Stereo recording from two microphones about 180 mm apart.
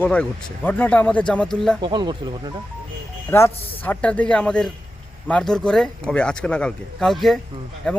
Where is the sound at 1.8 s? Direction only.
25° right (ahead or behind).